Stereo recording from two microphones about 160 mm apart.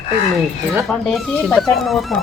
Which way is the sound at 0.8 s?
5° left (ahead or behind).